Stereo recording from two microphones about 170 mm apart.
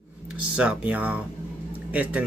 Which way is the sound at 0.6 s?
5° right (ahead or behind).